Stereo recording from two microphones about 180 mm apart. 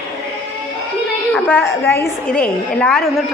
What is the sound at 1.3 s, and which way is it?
A woman's voice, 10° left (ahead or behind).